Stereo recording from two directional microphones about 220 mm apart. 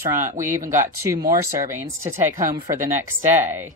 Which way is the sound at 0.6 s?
35° right (ahead or behind).